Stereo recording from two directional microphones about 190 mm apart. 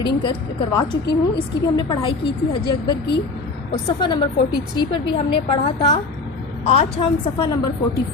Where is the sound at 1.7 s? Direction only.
25° left (ahead or behind).